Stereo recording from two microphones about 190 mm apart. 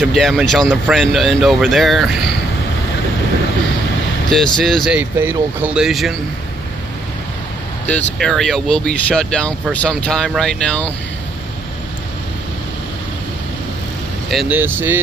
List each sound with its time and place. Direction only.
0.0 s speech: centre (ahead or behind)
4.3 s speech: 5° left (ahead or behind)
7.9 s speech: centre (ahead or behind)
14.3 s speech: centre (ahead or behind)
14.6 s speech: 10° right (ahead or behind)